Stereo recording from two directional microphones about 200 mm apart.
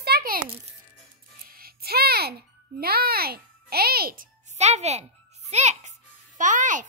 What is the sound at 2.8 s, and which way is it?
A child's voice, 50° right (ahead or behind).